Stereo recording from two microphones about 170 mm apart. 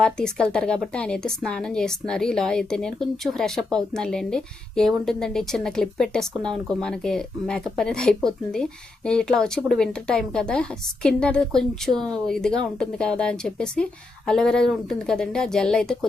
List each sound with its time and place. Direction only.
0.0 s a woman's voice: 5° left (ahead or behind)